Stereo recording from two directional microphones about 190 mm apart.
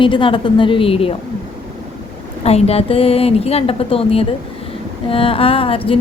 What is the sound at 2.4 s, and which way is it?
Speech, 35° left (ahead or behind).